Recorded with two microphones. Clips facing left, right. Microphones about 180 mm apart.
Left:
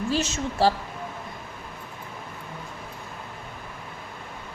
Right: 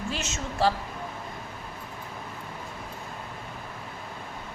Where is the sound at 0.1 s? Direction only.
35° left (ahead or behind).